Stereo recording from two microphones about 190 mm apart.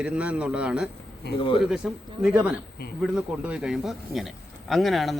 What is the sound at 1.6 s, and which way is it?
Speech, 5° right (ahead or behind).